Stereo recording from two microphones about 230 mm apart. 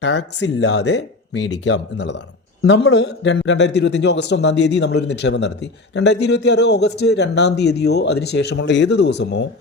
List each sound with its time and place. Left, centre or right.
0.0 s a man's voice: left